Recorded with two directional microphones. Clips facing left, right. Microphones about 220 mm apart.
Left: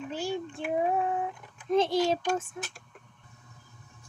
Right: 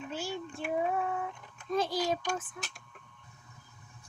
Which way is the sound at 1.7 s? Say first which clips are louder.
Left 6 dB; 25° left (ahead or behind).